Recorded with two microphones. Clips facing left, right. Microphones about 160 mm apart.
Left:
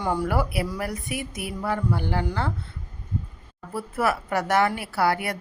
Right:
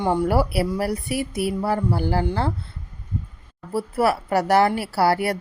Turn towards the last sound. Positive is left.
turn(degrees=-30)  # may be behind; listen again after turning